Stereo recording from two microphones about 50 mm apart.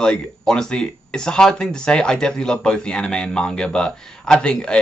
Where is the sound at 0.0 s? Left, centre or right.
Centre.